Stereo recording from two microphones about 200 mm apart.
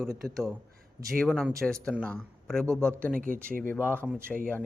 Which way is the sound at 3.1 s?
45° right (ahead or behind).